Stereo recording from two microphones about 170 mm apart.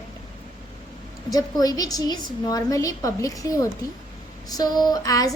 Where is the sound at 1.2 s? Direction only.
20° left (ahead or behind).